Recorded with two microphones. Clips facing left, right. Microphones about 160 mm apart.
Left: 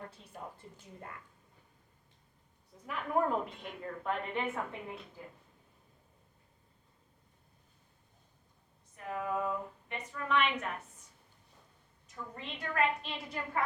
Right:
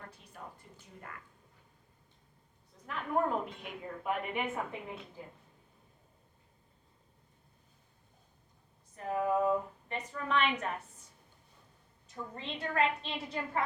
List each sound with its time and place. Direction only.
0.3 s a woman's voice: 25° left (ahead or behind)
2.8 s a woman's voice: 5° left (ahead or behind)
9.0 s a woman's voice: 35° right (ahead or behind)
12.0 s a woman's voice: 30° right (ahead or behind)